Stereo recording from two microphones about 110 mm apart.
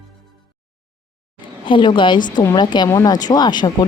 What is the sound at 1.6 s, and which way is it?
Speech, 50° left (ahead or behind).